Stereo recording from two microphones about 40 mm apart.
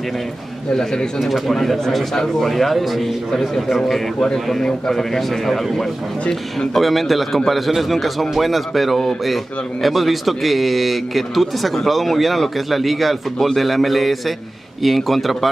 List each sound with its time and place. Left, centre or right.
0.7 s a man's voice: centre
1.2 s a man's voice: centre
4.6 s a man's voice: centre